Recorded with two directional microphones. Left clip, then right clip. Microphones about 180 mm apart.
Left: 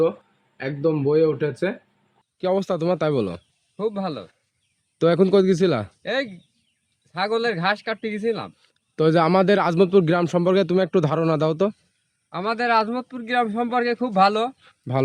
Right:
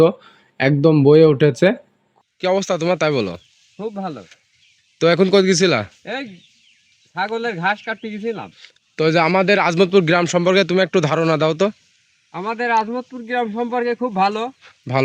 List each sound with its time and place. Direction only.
0.5 s speech: 45° right (ahead or behind)
2.4 s speech: 5° left (ahead or behind)
3.8 s a man's voice: 25° left (ahead or behind)
4.9 s speech: centre (ahead or behind)
6.0 s a man's voice: 25° left (ahead or behind)
8.4 s speech: centre (ahead or behind)
9.0 s speech: 15° left (ahead or behind); by 11.8 s centre (ahead or behind)
12.3 s a man's voice: 20° left (ahead or behind)
14.6 s speech: centre (ahead or behind)